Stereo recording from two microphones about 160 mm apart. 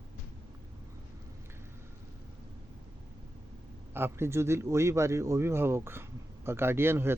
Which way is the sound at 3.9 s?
15° right (ahead or behind).